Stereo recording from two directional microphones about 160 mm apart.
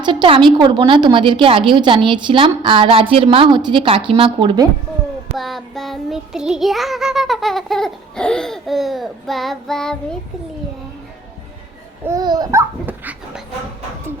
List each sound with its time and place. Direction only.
0.0 s a woman's voice: 30° right (ahead or behind)
5.4 s child singing: centre (ahead or behind)
12.0 s speech: 25° right (ahead or behind)